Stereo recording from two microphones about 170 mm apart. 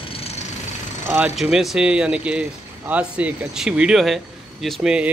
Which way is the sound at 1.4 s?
Centre (ahead or behind).